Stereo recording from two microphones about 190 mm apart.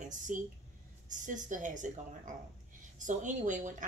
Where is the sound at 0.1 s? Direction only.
40° right (ahead or behind).